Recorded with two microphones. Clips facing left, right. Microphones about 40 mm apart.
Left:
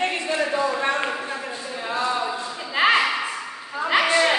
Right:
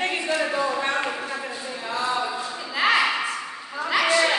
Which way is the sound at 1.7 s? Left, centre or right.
Centre.